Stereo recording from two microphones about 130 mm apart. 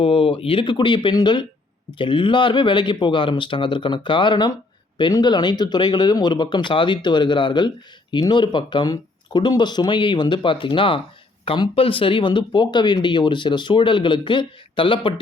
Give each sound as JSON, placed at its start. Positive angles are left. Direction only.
{"t": 0.0, "sound": "speech", "side_deg": 45}